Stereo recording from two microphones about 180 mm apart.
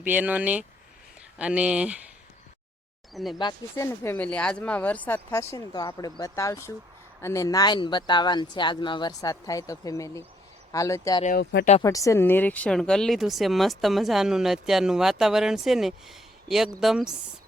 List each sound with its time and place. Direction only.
0.0 s speech: 10° right (ahead or behind)
3.1 s speech: centre (ahead or behind)
3.3 s speech: 20° left (ahead or behind); by 17.2 s 5° right (ahead or behind)